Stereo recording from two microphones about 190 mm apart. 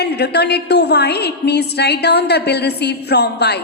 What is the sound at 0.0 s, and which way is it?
A woman's voice, 60° left (ahead or behind).